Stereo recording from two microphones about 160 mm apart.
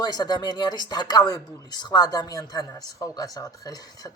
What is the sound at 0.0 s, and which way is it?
A woman's voice, 25° left (ahead or behind).